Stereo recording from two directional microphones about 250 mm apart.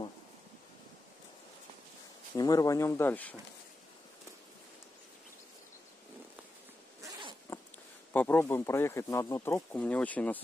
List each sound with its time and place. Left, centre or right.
2.3 s speech: centre
7.0 s zipper: centre
8.1 s speech: centre